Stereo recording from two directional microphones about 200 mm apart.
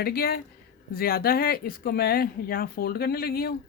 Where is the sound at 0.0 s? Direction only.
50° left (ahead or behind).